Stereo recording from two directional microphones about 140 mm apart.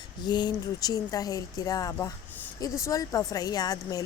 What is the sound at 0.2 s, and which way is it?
A woman's voice, 30° left (ahead or behind).